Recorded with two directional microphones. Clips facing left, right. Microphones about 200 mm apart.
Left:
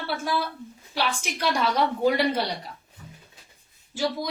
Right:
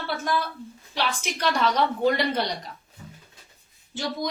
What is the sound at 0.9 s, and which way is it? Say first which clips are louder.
A woman's voice: even; 10° left (ahead or behind).